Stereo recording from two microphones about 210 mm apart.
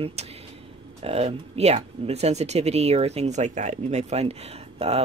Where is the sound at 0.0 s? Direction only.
30° right (ahead or behind).